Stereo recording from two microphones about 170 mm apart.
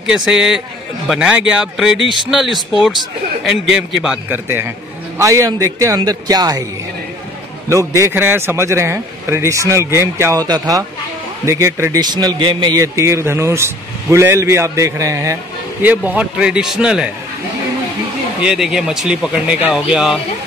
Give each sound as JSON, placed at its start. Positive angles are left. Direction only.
{"t": 0.0, "sound": "a man's voice", "side_deg": -5}
{"t": 7.7, "sound": "a man's voice", "side_deg": -15}
{"t": 18.4, "sound": "speech", "side_deg": -5}